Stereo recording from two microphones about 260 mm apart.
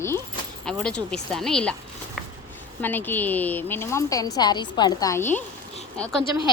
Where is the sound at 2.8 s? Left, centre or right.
Centre.